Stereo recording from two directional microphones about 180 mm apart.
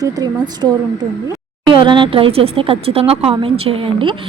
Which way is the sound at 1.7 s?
25° right (ahead or behind).